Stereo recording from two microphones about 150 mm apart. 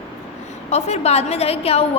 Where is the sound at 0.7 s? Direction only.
45° left (ahead or behind).